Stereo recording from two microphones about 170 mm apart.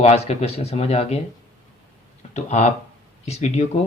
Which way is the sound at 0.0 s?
40° left (ahead or behind).